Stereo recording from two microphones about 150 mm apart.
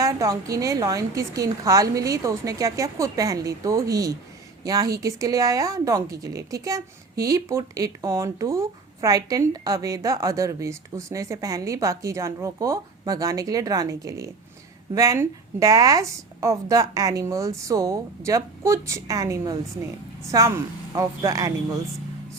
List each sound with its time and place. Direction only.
0.0 s a woman's voice: 20° right (ahead or behind)